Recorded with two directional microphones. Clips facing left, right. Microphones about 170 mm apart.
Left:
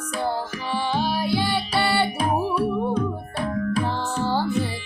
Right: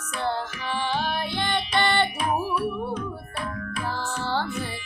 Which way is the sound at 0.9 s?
35° left (ahead or behind).